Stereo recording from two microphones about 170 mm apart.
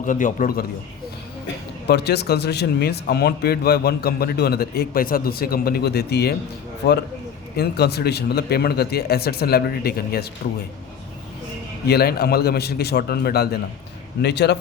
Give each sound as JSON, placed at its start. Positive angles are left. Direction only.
{"t": 0.0, "sound": "a man's voice", "side_deg": 50}
{"t": 1.9, "sound": "speech", "side_deg": 75}
{"t": 7.5, "sound": "speech", "side_deg": 70}
{"t": 11.9, "sound": "speech", "side_deg": 65}
{"t": 14.2, "sound": "a man's voice", "side_deg": 80}